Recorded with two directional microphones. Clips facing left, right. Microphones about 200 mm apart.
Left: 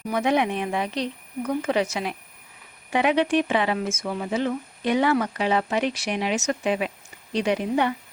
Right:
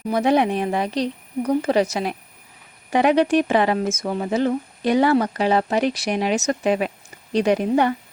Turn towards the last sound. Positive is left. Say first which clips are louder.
# right 5 dB
turn(degrees=-45)  # may be behind; listen again after turning